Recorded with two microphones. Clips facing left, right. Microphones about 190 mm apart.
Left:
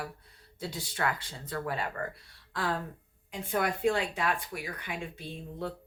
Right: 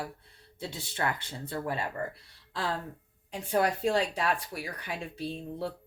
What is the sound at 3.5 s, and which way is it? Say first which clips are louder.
Speech: right 2 dB; 35° right (ahead or behind).